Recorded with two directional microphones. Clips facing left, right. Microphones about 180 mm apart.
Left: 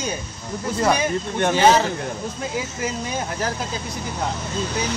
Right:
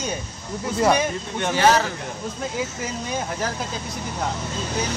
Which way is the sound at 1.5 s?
20° left (ahead or behind).